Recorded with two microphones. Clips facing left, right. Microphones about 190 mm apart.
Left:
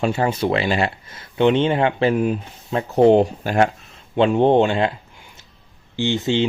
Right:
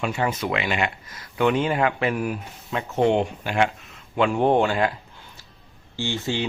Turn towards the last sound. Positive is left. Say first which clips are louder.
# left 7 dB
turn(degrees=20)  # may be behind; listen again after turning